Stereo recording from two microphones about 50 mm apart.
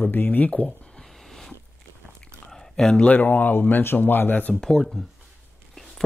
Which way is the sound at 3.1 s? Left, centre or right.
Left.